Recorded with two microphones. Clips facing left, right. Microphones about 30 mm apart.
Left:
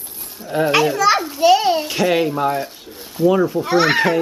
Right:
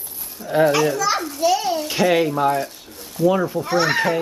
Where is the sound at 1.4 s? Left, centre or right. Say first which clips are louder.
Left 6 dB; left.